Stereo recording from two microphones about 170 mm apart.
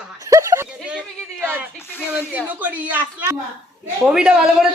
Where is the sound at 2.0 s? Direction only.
10° right (ahead or behind).